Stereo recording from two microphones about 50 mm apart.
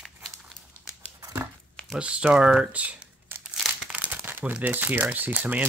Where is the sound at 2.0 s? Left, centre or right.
Right.